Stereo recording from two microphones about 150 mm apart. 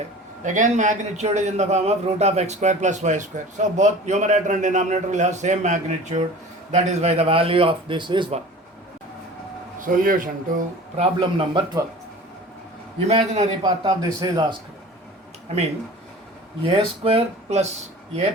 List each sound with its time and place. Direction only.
0.4 s a man's voice: 55° right (ahead or behind); by 8.4 s 30° right (ahead or behind)
9.8 s a man's voice: 65° right (ahead or behind)
10.9 s a man's voice: 40° right (ahead or behind)
13.1 s a man's voice: 50° right (ahead or behind)
13.6 s speech: 25° right (ahead or behind)
15.5 s a man's voice: 45° right (ahead or behind)